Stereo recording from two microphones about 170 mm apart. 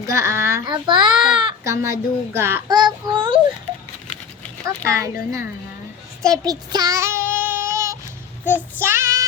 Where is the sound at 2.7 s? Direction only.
25° right (ahead or behind).